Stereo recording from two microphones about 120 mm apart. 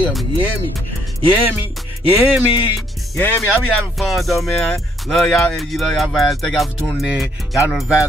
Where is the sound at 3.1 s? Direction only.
20° left (ahead or behind).